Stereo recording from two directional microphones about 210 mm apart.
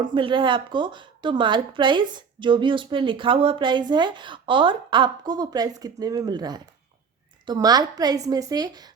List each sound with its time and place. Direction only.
0.0 s a woman's voice: 25° right (ahead or behind)